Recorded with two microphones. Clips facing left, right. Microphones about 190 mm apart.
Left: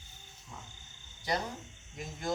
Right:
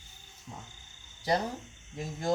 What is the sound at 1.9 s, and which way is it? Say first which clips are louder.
Speech: right 5 dB; 35° right (ahead or behind).